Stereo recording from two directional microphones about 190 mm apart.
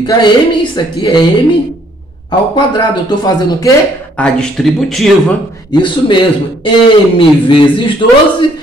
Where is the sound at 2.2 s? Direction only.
25° left (ahead or behind).